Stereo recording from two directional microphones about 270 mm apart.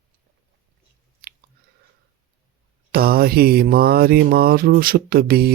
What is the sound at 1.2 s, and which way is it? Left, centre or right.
Chewing, right.